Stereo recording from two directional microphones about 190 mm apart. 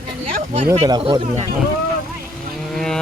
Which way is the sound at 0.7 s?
30° right (ahead or behind).